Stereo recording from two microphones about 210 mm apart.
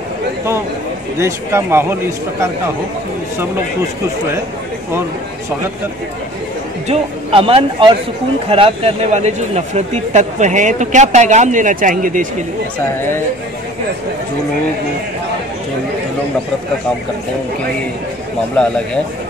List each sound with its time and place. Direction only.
1.2 s speech: 10° right (ahead or behind)
6.9 s a man's voice: 25° right (ahead or behind)
12.9 s speech: 10° left (ahead or behind)